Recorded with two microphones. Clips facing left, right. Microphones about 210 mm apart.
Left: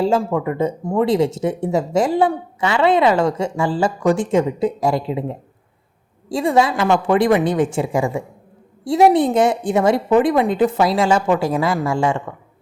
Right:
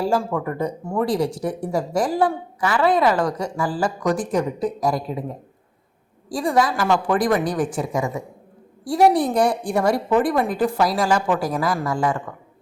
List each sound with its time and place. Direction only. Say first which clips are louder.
0.0 s a woman's voice: left 4 dB; 25° left (ahead or behind)